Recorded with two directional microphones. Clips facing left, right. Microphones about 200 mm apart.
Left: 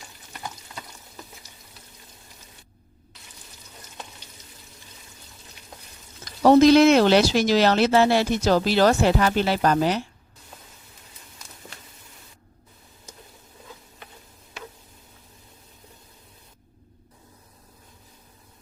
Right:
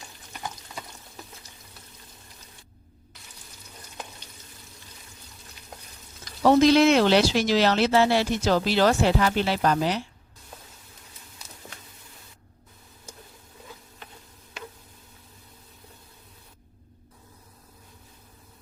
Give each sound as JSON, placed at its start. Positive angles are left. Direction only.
{"t": 6.4, "sound": "speech", "side_deg": 45}